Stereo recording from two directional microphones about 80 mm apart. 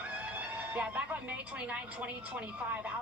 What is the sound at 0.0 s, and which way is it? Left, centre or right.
A woman's voice, centre.